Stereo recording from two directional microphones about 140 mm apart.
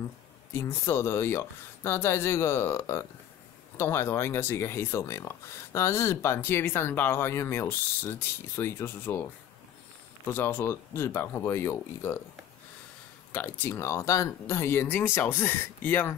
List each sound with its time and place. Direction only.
0.5 s speech: 20° left (ahead or behind)
13.3 s speech: 15° left (ahead or behind)